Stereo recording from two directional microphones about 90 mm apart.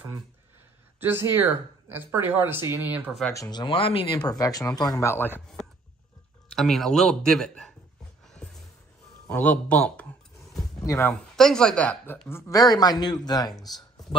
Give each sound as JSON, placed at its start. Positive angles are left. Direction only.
{"t": 0.9, "sound": "speech", "side_deg": -25}
{"t": 3.3, "sound": "speech", "side_deg": 45}
{"t": 3.6, "sound": "speech", "side_deg": 85}
{"t": 4.2, "sound": "speech", "side_deg": 45}
{"t": 5.0, "sound": "speech", "side_deg": 25}
{"t": 6.5, "sound": "speech", "side_deg": 5}
{"t": 9.3, "sound": "speech", "side_deg": 15}
{"t": 11.3, "sound": "speech", "side_deg": 5}
{"t": 12.3, "sound": "speech", "side_deg": 35}
{"t": 13.7, "sound": "a sound", "side_deg": 50}